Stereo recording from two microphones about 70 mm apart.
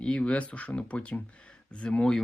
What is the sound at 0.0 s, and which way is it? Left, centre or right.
Speech, centre.